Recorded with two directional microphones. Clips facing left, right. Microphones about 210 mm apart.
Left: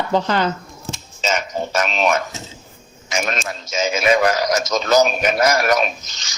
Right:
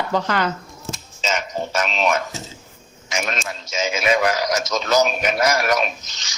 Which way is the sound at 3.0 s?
45° left (ahead or behind).